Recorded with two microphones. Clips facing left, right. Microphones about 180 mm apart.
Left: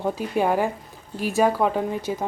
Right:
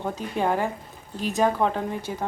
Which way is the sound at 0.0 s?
10° left (ahead or behind).